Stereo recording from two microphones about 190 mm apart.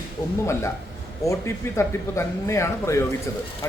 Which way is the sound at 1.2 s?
15° left (ahead or behind).